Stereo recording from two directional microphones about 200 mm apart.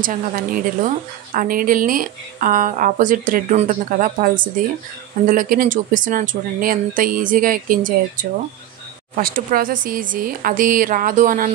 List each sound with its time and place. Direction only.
0.0 s a woman's voice: 45° right (ahead or behind)